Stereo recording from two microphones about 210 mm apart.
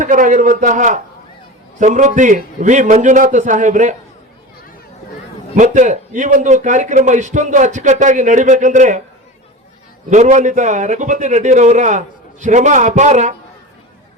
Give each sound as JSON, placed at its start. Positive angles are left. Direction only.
{"t": 0.0, "sound": "a man's voice", "side_deg": -40}
{"t": 5.5, "sound": "a man's voice", "side_deg": -35}
{"t": 10.1, "sound": "a man's voice", "side_deg": -35}